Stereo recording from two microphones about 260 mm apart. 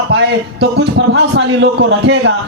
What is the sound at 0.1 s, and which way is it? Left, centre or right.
A man's voice, right.